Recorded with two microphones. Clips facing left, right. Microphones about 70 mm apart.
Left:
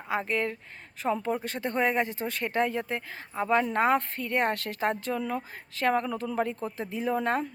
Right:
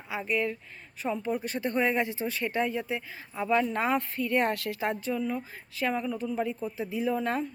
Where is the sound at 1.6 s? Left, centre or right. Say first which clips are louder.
Right 1 dB; centre.